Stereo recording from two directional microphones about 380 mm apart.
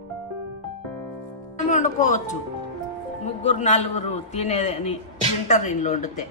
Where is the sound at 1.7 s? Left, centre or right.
Centre.